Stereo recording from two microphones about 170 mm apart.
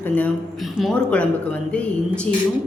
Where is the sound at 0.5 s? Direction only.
Centre (ahead or behind).